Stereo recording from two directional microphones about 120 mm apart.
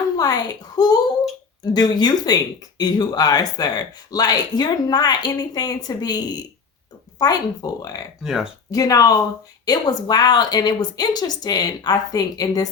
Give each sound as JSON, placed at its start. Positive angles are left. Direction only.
{"t": 0.2, "sound": "a child's voice", "side_deg": 35}
{"t": 8.2, "sound": "speech", "side_deg": -5}
{"t": 8.7, "sound": "speech", "side_deg": 30}